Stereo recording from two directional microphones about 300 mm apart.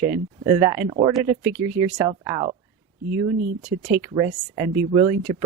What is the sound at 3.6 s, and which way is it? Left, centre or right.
Speech, centre.